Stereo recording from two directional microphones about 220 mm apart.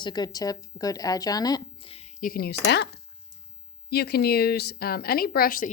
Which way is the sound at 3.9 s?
45° left (ahead or behind).